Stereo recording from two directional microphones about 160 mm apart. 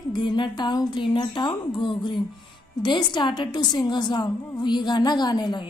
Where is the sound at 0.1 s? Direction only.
30° left (ahead or behind).